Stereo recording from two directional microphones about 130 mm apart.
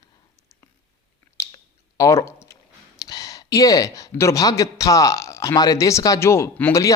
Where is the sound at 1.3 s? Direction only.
25° left (ahead or behind).